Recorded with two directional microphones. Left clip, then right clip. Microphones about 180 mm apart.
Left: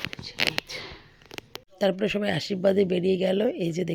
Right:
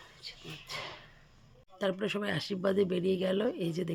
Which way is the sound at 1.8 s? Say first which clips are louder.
Left 8 dB; 25° left (ahead or behind).